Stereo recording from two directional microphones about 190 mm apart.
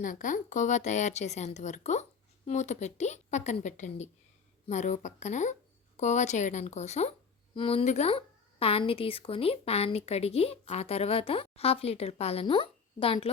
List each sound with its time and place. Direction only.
0.0 s speech: 45° left (ahead or behind)